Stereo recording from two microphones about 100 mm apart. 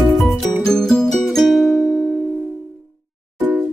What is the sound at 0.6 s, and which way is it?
Music, 5° left (ahead or behind).